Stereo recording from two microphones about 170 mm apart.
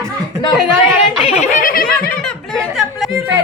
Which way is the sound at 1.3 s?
40° left (ahead or behind).